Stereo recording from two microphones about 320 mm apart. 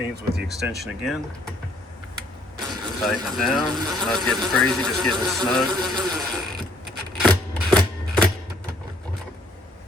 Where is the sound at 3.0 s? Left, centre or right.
Centre.